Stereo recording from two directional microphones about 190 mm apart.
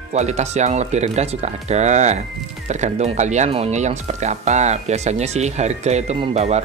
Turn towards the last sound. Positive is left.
turn(degrees=-35)  # may be behind; listen again after turning